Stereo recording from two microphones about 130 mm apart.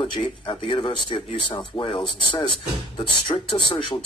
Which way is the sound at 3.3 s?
30° left (ahead or behind).